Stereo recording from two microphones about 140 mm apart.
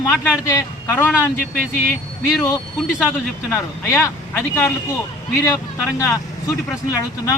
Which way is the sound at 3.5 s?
20° left (ahead or behind).